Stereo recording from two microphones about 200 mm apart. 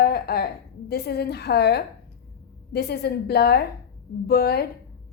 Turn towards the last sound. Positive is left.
turn(degrees=50)  # may be behind; listen again after turning